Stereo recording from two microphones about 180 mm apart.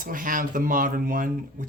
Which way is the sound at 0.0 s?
50° right (ahead or behind).